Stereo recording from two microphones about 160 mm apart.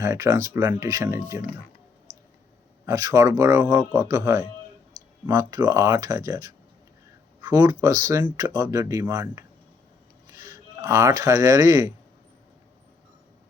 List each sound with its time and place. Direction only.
0.0 s speech: 20° right (ahead or behind)
2.8 s speech: 20° right (ahead or behind)